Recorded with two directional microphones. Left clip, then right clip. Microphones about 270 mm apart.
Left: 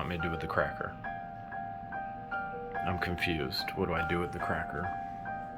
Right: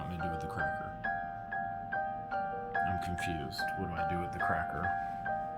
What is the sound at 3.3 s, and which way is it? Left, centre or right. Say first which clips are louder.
Speech: left 2 dB; left.